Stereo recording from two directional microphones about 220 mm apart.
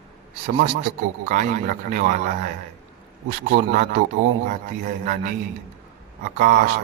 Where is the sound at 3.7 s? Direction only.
35° right (ahead or behind).